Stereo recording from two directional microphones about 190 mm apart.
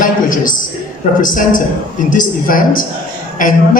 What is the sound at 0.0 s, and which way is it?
A man's voice, 45° left (ahead or behind).